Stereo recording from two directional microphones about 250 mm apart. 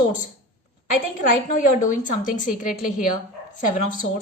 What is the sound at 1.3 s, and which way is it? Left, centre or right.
A woman's voice, left.